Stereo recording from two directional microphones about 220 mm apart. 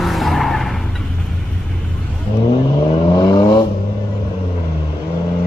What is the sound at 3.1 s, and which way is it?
Vehicle, 20° left (ahead or behind).